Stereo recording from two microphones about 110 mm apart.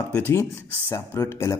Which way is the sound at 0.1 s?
20° left (ahead or behind).